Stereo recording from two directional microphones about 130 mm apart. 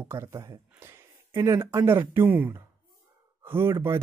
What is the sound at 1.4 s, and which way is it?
Speech, 20° right (ahead or behind).